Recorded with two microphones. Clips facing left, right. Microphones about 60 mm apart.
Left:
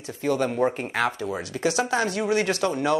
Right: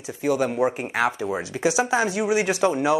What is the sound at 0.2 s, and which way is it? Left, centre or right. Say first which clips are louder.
Speech: right 1 dB; centre.